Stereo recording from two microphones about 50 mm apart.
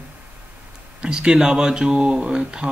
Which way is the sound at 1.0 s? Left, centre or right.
Centre.